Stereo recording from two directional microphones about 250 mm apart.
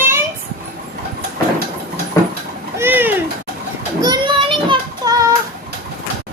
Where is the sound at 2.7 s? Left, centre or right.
Centre.